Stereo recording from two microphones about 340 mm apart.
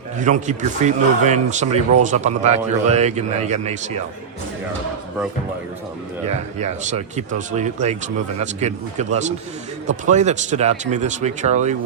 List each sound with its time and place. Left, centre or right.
0.2 s speech: right
6.2 s speech: centre